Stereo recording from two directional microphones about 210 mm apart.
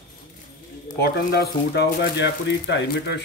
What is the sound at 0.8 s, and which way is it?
Speech, 50° left (ahead or behind).